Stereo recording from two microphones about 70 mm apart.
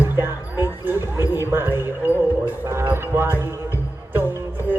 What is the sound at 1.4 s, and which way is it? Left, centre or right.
Music, right.